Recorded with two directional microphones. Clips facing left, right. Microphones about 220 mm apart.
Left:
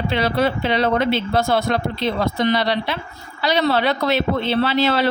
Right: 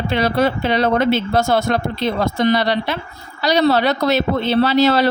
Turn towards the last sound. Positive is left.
turn(degrees=-40)  # may be behind; listen again after turning